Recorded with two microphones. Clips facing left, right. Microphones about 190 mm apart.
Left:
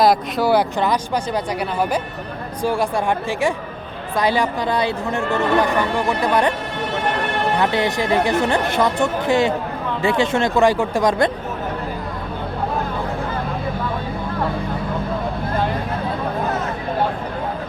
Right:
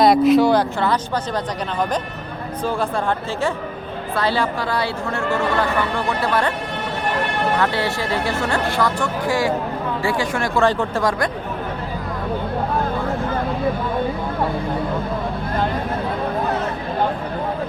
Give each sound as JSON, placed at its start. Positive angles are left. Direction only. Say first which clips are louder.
{"t": 0.0, "sound": "speech", "louder": "right 4 dB", "side_deg": 0}
{"t": 0.8, "sound": "speech", "louder": "left 1 dB", "side_deg": 15}
{"t": 2.6, "sound": "speech", "louder": "left 2 dB", "side_deg": 15}
{"t": 7.6, "sound": "speech", "louder": "left 2 dB", "side_deg": 20}